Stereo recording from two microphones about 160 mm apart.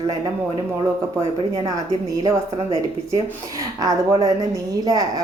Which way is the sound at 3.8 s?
20° right (ahead or behind).